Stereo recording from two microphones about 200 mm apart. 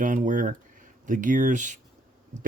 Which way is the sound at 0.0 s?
40° right (ahead or behind).